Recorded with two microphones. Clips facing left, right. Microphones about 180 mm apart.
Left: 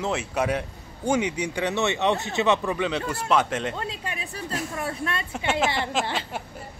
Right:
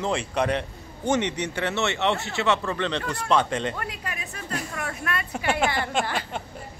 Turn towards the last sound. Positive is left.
turn(degrees=25)  # may be behind; listen again after turning